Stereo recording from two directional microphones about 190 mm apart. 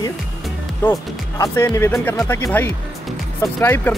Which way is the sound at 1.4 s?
15° left (ahead or behind).